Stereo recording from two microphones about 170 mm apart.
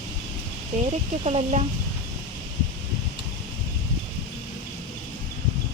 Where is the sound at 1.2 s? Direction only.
40° right (ahead or behind).